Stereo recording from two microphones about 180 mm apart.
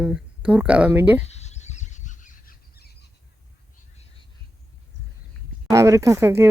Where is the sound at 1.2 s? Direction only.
40° left (ahead or behind); by 3.1 s 60° left (ahead or behind).